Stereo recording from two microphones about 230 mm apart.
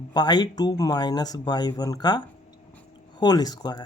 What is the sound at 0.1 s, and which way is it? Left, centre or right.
Speech, centre.